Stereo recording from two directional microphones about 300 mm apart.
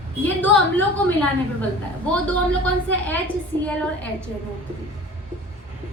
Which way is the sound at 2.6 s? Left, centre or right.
Centre.